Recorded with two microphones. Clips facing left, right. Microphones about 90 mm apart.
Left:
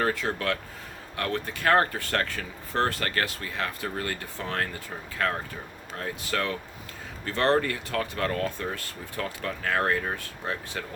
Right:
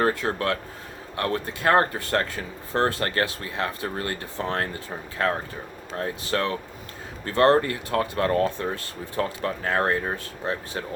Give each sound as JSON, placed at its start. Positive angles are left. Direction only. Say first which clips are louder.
{"t": 0.0, "sound": "speech", "louder": "right 4 dB", "side_deg": -35}